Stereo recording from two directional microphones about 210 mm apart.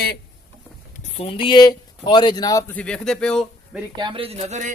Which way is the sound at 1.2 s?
25° left (ahead or behind).